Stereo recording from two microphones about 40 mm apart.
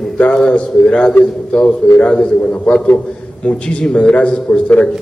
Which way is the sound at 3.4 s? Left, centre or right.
Left.